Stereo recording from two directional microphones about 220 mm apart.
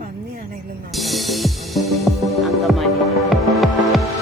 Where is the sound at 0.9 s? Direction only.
Centre (ahead or behind).